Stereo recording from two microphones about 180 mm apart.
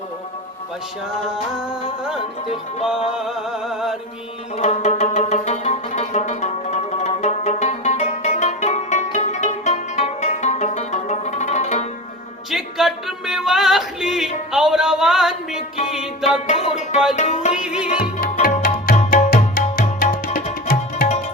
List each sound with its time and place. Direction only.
3.2 s music: 5° right (ahead or behind)
4.5 s music: 40° left (ahead or behind)
12.5 s singing: centre (ahead or behind)
16.5 s music: 40° left (ahead or behind)
17.5 s singing: 5° right (ahead or behind)
18.2 s tabla: 50° left (ahead or behind)
18.9 s music: 50° left (ahead or behind)